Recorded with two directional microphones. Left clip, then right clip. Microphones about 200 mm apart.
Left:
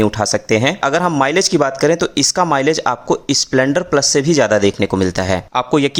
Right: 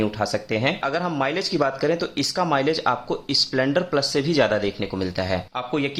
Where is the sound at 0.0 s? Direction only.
40° left (ahead or behind).